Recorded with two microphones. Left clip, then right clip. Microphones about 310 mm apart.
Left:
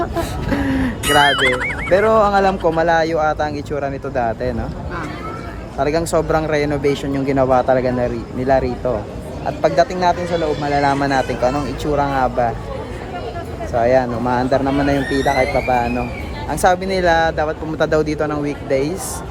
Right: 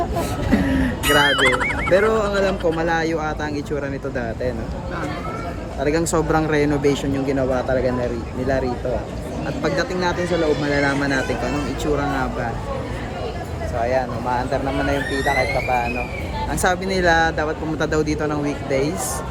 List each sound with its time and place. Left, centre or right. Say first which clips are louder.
0.5 s vehicle: left 1 dB; centre
1.0 s speech: left 3 dB; centre
1.9 s speech: left 5 dB; centre
5.8 s speech: left 3 dB; centre
7.3 s speech: left 8 dB; left
9.6 s speech: left 7 dB; centre
13.8 s speech: left 6 dB; left
16.5 s speech: left 6 dB; centre